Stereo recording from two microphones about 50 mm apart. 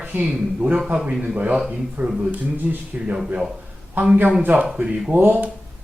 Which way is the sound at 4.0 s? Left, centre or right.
Right.